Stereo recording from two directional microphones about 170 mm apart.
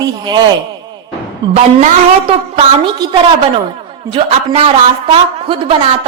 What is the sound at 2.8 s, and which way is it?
A woman's voice, 30° right (ahead or behind).